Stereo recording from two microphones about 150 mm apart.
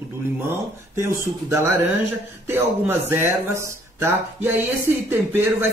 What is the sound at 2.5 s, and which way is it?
Speech, 15° right (ahead or behind).